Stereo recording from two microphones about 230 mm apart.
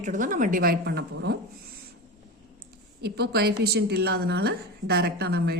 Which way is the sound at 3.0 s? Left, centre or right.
Right.